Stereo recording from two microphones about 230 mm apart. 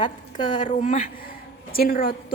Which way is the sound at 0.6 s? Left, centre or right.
Left.